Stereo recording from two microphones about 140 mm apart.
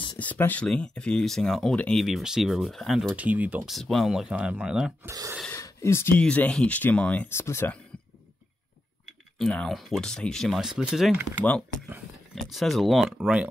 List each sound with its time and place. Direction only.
0.2 s speech: 10° left (ahead or behind); by 3.7 s 10° right (ahead or behind)
3.7 s speech: centre (ahead or behind)
5.0 s speech: 25° right (ahead or behind)
5.5 s speech: 20° left (ahead or behind)
9.0 s speech: 5° left (ahead or behind)
12.4 s speech: centre (ahead or behind)